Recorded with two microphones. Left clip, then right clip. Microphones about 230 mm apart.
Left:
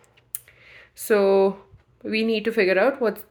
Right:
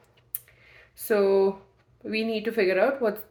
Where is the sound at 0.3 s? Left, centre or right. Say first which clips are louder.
Left 5 dB; left.